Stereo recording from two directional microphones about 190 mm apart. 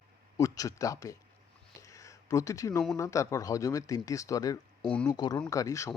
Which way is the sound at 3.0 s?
15° left (ahead or behind).